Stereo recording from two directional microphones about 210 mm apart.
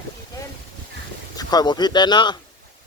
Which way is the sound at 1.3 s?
20° left (ahead or behind).